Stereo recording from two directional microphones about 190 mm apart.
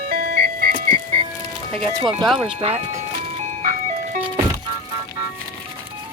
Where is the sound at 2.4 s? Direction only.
30° right (ahead or behind).